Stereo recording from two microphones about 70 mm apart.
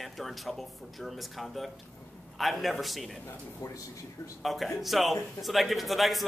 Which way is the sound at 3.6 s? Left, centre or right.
Left.